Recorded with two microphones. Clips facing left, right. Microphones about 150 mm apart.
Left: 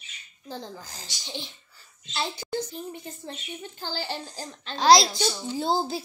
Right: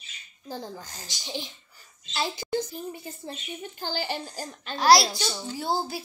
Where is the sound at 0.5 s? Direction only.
10° right (ahead or behind).